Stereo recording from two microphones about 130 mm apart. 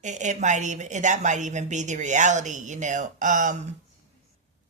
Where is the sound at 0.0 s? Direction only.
70° right (ahead or behind).